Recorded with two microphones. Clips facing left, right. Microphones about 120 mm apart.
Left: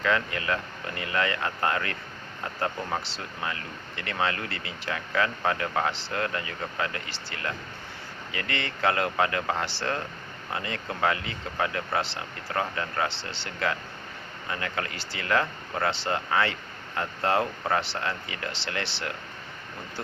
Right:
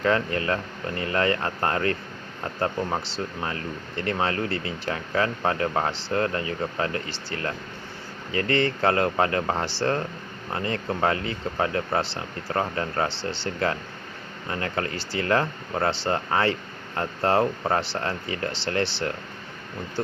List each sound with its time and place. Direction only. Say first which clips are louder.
0.0 s speech: right 4 dB; 35° right (ahead or behind)
3.4 s speech: right 3 dB; 35° right (ahead or behind)
13.1 s speech: right 6 dB; centre (ahead or behind)
13.4 s speech: right 2 dB; 35° right (ahead or behind)